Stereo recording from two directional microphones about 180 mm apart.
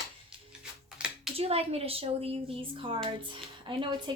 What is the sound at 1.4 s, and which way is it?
A woman's voice, 35° right (ahead or behind).